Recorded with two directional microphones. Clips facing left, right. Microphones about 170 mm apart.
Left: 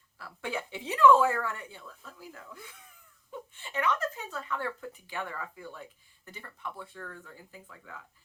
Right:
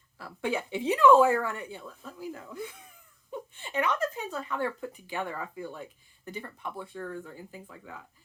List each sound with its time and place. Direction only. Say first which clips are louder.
0.2 s speech: right 5 dB; 20° right (ahead or behind)